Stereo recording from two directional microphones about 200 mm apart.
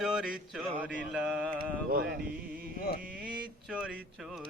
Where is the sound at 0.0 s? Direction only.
5° right (ahead or behind).